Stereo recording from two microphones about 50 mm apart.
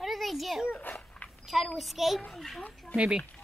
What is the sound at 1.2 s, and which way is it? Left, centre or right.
A child's voice, centre.